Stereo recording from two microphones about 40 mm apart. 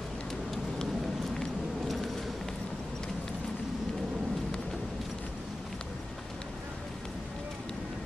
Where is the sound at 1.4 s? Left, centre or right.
Centre.